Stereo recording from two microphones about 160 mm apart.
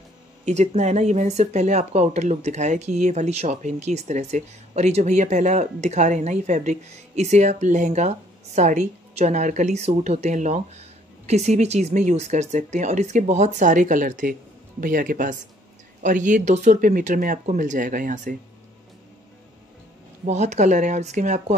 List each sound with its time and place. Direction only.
0.5 s speech: 45° right (ahead or behind)
20.2 s speech: 45° right (ahead or behind)